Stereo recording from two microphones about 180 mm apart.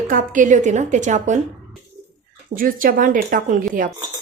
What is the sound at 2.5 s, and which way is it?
Speech, 50° right (ahead or behind).